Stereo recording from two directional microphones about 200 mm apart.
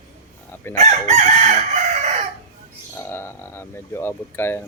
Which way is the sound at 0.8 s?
35° right (ahead or behind).